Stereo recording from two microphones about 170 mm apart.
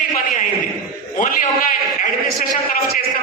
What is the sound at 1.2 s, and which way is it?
Speech, 50° left (ahead or behind).